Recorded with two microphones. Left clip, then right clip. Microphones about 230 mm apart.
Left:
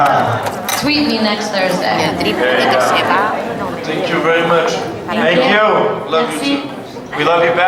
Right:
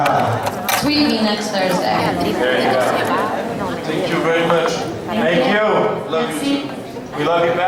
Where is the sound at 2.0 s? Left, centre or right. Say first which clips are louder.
Left 3 dB; centre.